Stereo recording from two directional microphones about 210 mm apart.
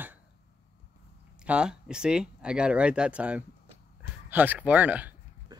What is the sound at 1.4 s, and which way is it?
Speech, 5° right (ahead or behind).